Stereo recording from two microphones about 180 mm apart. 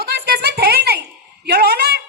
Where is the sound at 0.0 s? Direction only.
60° right (ahead or behind).